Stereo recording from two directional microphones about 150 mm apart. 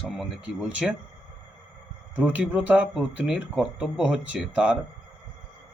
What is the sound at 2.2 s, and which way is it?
Speech, 10° right (ahead or behind).